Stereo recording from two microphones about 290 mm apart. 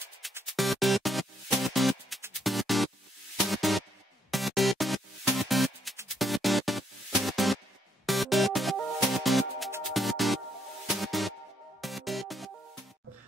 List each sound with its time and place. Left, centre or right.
0.2 s music: centre